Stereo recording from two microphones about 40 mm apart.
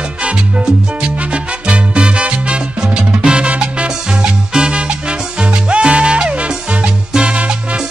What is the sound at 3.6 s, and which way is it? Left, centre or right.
Music, centre.